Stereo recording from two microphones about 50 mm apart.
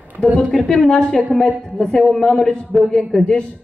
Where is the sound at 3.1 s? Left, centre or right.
Centre.